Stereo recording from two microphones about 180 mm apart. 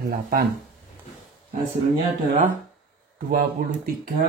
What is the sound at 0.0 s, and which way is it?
Speech, 55° right (ahead or behind).